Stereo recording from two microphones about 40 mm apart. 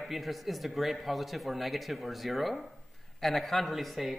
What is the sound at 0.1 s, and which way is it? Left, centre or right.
A man's voice, centre.